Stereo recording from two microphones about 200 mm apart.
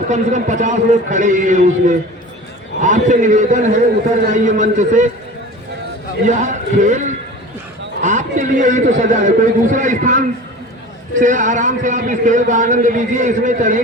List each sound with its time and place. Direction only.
0.1 s a man's voice: 35° right (ahead or behind)
6.2 s a man's voice: 35° right (ahead or behind)